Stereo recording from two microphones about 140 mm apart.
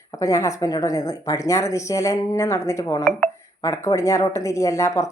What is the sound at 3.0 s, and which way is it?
Speech, centre (ahead or behind).